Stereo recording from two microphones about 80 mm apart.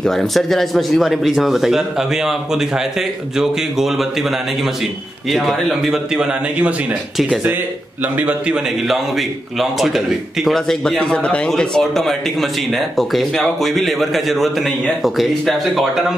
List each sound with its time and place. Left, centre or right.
0.0 s a man's voice: centre
5.3 s a man's voice: centre
8.2 s a man's voice: centre
9.6 s a man's voice: centre